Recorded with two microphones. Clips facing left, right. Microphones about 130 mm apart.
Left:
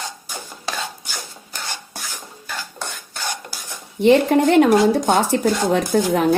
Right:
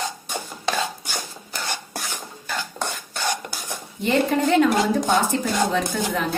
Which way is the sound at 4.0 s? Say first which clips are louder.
Left 7 dB; 65° left (ahead or behind).